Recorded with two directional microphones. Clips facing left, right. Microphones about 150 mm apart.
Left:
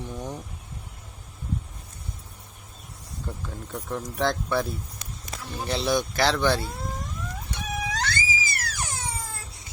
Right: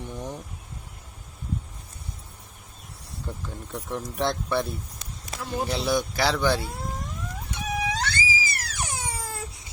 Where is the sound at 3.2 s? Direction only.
Centre (ahead or behind).